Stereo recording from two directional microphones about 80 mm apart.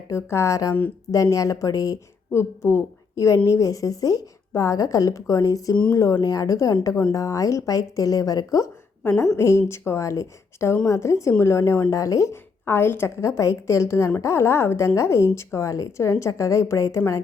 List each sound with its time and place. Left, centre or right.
0.1 s a woman's voice: left
2.3 s a woman's voice: left
9.4 s a woman's voice: left
12.6 s a woman's voice: left